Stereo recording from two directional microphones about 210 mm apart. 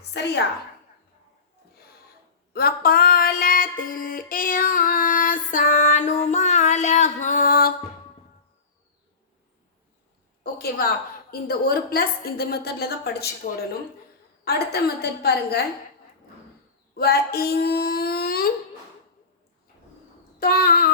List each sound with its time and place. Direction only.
0.1 s a woman's voice: 55° left (ahead or behind)
2.5 s a sound: 45° left (ahead or behind)
10.4 s a woman's voice: 45° left (ahead or behind)
17.0 s speech: 50° left (ahead or behind)
20.4 s a woman's voice: 45° left (ahead or behind)